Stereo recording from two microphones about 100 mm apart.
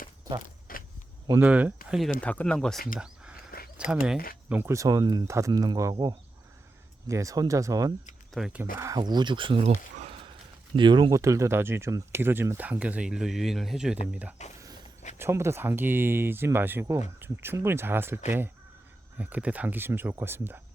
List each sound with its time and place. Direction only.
1.4 s speech: 15° right (ahead or behind)
2.2 s speech: 15° left (ahead or behind)
3.8 s speech: 10° right (ahead or behind)
4.5 s speech: 25° right (ahead or behind)
8.3 s speech: centre (ahead or behind)
9.0 s speech: 45° right (ahead or behind); by 9.7 s 65° right (ahead or behind)
10.8 s speech: 55° right (ahead or behind)
11.1 s speech: 30° right (ahead or behind); by 14.3 s 15° right (ahead or behind)
15.2 s speech: 25° right (ahead or behind)